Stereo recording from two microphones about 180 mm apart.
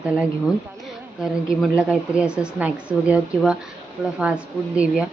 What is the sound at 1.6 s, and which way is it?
A woman's voice, 5° right (ahead or behind).